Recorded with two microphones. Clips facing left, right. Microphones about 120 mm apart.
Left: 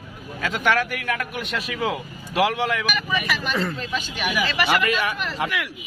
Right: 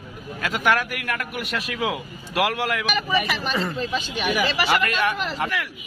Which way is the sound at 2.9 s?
30° right (ahead or behind).